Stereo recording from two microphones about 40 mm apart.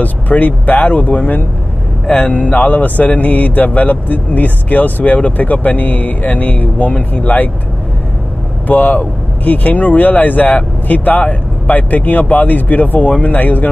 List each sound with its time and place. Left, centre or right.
0.0 s speech: left
2.0 s speech: left
2.5 s speech: left
8.6 s speech: left